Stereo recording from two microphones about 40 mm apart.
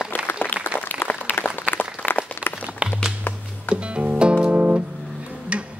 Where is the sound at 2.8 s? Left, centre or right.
Right.